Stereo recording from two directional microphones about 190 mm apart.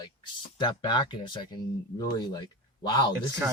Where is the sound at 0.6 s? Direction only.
25° left (ahead or behind).